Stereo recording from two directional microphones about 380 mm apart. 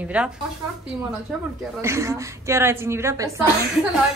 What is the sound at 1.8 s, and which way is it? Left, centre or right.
A woman's voice, centre.